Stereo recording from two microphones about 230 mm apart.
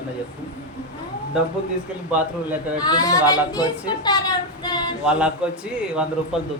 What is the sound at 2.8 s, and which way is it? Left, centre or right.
Speech, centre.